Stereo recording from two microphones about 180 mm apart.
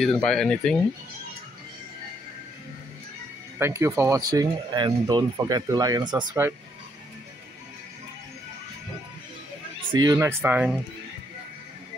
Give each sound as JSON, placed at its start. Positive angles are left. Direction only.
{"t": 0.0, "sound": "speech", "side_deg": 5}
{"t": 3.5, "sound": "speech", "side_deg": -15}
{"t": 9.9, "sound": "speech", "side_deg": -15}